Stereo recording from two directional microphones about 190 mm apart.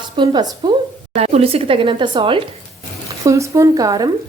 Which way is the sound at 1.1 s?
35° right (ahead or behind).